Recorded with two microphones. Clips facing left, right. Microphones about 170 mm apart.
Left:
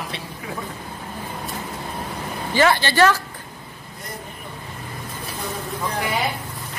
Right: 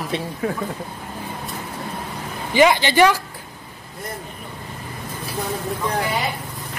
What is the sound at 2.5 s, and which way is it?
Speech, 15° right (ahead or behind).